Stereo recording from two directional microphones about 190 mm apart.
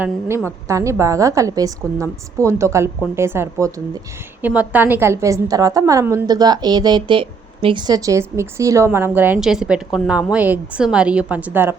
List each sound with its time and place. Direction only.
0.0 s a woman's voice: 10° right (ahead or behind)